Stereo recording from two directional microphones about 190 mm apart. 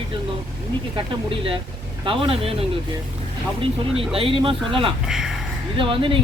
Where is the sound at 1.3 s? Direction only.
25° right (ahead or behind).